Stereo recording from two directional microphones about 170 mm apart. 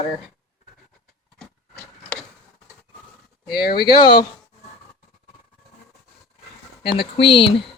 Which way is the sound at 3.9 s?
25° left (ahead or behind).